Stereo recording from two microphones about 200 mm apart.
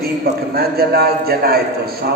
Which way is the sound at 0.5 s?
50° right (ahead or behind).